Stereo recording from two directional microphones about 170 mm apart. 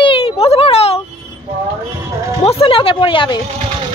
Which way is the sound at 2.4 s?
35° left (ahead or behind).